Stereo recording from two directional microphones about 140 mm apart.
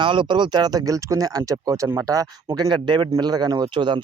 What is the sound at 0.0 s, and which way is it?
Speech, 35° right (ahead or behind).